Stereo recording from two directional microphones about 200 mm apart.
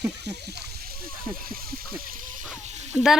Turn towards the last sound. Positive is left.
turn(degrees=-5)  # may be behind; listen again after turning